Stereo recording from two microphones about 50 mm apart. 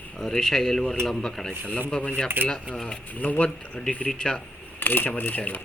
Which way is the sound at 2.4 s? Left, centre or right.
Right.